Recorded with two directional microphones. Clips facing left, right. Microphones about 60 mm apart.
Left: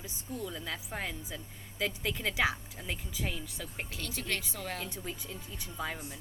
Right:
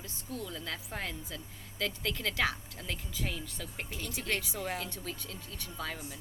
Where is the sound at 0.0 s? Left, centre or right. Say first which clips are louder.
Left 1 dB; centre.